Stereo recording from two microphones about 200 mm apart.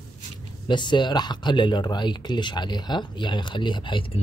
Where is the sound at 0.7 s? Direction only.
25° left (ahead or behind).